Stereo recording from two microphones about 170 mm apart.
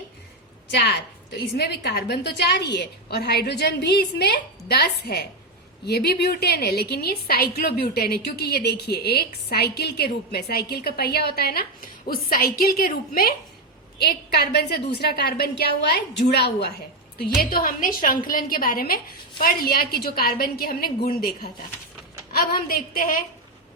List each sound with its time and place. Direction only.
0.7 s a woman's voice: 85° left
1.5 s a woman's voice: 75° left (ahead or behind)
2.7 s a woman's voice: 70° left (ahead or behind)
14.0 s a woman's voice: 70° left (ahead or behind)
17.2 s a woman's voice: 60° left (ahead or behind)